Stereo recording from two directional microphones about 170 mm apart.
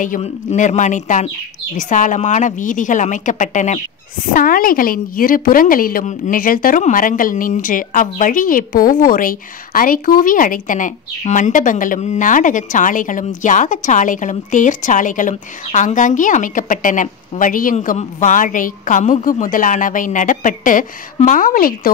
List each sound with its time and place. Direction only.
0.0 s a woman's voice: 45° left (ahead or behind)